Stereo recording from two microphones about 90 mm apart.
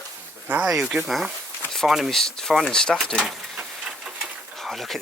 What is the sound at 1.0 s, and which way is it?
Speech, centre (ahead or behind).